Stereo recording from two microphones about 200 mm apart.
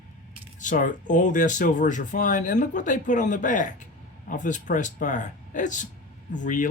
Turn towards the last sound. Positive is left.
turn(degrees=40)  # may be behind; listen again after turning